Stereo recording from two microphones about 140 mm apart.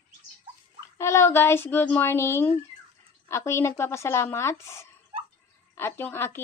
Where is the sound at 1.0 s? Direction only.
20° left (ahead or behind).